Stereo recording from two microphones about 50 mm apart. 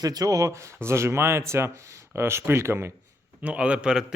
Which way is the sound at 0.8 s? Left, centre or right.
Right.